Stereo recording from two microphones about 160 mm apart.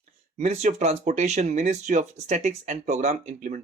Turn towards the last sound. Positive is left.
turn(degrees=-50)  # may be behind; listen again after turning